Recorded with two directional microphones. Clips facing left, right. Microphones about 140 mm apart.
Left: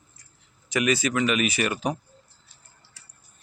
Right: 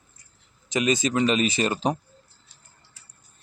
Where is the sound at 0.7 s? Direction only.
20° right (ahead or behind).